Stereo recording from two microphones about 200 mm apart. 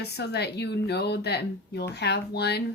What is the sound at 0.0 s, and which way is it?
Speech, 55° left (ahead or behind).